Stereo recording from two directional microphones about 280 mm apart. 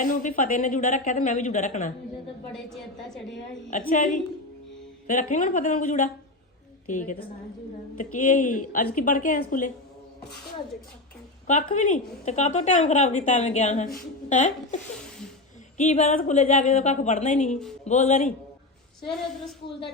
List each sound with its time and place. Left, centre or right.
0.0 s speech: left
3.7 s speech: left
11.4 s speech: left
15.8 s speech: left
19.0 s a woman's voice: centre